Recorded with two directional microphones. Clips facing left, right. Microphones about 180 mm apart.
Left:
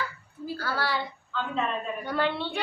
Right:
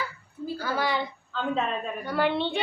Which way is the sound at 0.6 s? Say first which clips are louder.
Right 2 dB; 20° right (ahead or behind).